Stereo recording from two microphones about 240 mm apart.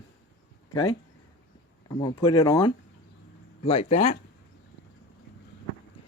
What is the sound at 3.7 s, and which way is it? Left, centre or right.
Speech, left.